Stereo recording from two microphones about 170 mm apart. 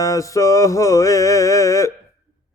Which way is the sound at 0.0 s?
20° left (ahead or behind).